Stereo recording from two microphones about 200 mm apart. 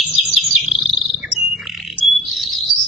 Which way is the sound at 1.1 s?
Centre (ahead or behind).